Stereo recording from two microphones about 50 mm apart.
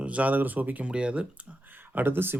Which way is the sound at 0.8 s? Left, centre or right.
Right.